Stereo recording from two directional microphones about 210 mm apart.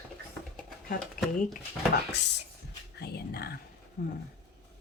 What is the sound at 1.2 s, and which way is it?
Speech, 40° left (ahead or behind).